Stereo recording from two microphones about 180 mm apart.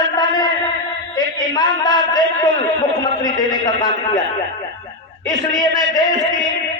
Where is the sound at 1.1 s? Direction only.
20° left (ahead or behind).